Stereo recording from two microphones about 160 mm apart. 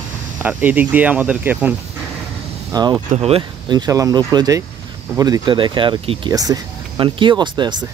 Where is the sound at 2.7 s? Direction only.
25° right (ahead or behind).